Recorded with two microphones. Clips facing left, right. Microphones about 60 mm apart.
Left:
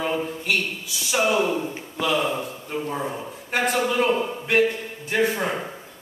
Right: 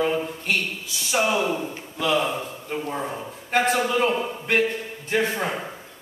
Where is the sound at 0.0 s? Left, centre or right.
Centre.